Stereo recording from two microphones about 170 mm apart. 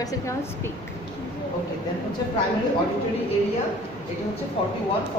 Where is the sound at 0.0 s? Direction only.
20° left (ahead or behind).